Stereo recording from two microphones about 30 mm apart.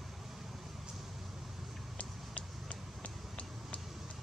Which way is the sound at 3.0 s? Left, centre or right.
Left.